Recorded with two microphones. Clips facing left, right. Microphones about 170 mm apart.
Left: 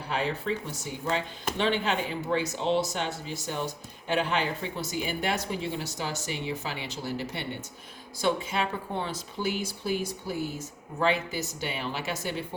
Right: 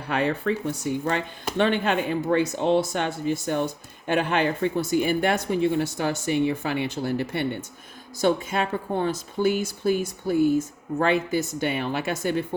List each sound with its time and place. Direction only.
0.1 s speech: 60° right (ahead or behind)